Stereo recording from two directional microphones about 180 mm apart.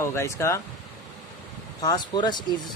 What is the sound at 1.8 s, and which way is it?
Speech, 25° left (ahead or behind).